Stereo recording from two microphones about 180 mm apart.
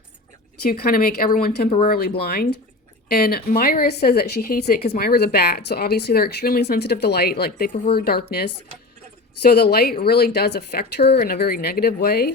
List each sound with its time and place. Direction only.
0.6 s speech: 55° left (ahead or behind)
9.5 s speech: 60° left (ahead or behind)